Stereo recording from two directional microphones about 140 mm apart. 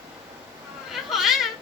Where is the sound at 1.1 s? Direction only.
Centre (ahead or behind).